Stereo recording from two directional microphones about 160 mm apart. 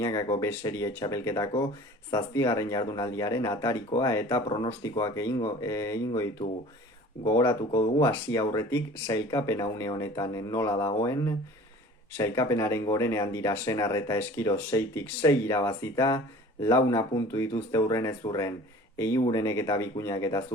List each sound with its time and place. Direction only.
0.0 s speech: 20° left (ahead or behind)
4.4 s speech: 30° left (ahead or behind)
4.8 s speech: 20° left (ahead or behind)
7.3 s speech: 20° left (ahead or behind)